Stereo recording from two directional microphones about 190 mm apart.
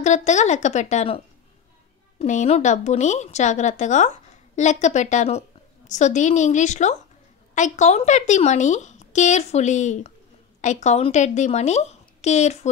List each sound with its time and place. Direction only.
0.0 s speech: 40° left (ahead or behind)